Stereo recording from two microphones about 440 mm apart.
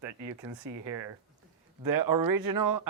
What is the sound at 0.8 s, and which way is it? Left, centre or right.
Speech, right.